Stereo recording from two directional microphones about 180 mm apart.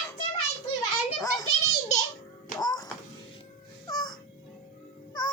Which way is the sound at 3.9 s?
20° left (ahead or behind).